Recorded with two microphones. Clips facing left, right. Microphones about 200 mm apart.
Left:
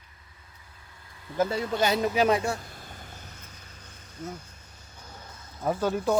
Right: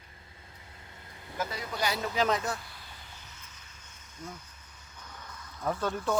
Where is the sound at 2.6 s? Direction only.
45° left (ahead or behind).